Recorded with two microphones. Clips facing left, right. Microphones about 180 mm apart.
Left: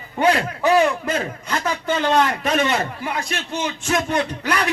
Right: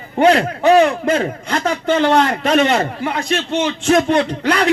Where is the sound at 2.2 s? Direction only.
30° right (ahead or behind).